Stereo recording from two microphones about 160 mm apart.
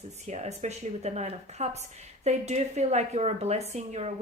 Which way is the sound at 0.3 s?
45° right (ahead or behind).